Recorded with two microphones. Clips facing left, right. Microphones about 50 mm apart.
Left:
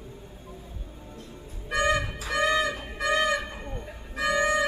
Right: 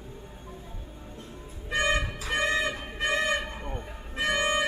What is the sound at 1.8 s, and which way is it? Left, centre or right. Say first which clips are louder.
Music: left 2 dB; right.